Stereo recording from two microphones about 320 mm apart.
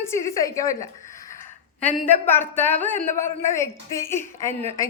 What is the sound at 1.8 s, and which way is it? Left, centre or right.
A woman's voice, centre.